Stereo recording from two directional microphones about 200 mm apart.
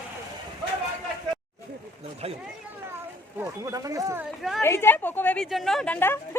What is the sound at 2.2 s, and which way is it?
Speech, 30° right (ahead or behind).